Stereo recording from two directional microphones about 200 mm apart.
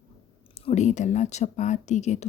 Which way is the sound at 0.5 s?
35° left (ahead or behind).